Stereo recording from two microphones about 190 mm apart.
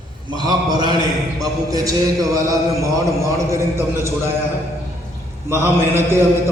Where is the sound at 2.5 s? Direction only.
15° right (ahead or behind).